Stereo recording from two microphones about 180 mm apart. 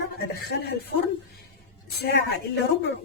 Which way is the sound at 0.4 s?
60° left (ahead or behind).